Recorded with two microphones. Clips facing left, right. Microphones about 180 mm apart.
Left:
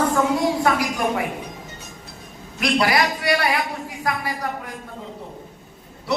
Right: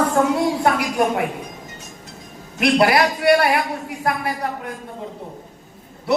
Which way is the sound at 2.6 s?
60° right (ahead or behind).